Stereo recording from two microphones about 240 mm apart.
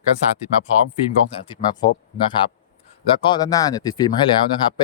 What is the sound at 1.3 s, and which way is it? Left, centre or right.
Speech, left.